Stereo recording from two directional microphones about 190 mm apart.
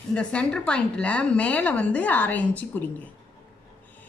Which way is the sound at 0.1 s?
5° left (ahead or behind).